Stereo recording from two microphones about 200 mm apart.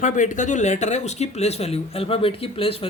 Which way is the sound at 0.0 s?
40° left (ahead or behind).